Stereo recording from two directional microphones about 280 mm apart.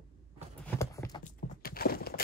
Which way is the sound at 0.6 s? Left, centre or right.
Centre.